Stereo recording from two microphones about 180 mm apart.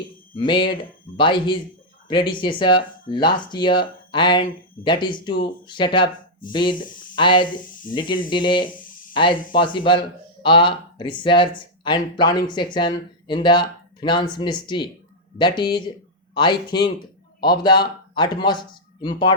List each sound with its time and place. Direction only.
0.3 s speech: 30° left (ahead or behind)